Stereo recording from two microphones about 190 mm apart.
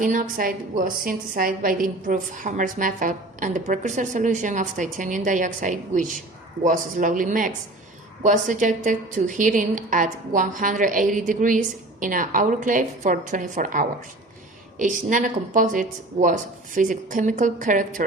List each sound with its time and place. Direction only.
0.0 s a woman's voice: 45° right (ahead or behind)